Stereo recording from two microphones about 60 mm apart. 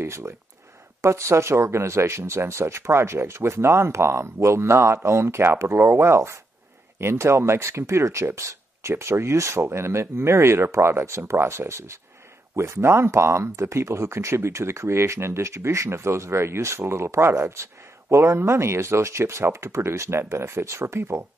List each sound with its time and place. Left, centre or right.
0.0 s speech: right